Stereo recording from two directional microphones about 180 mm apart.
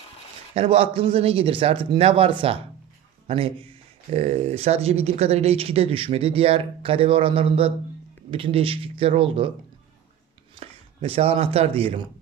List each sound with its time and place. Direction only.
0.5 s speech: 30° right (ahead or behind)
10.5 s speech: 30° right (ahead or behind)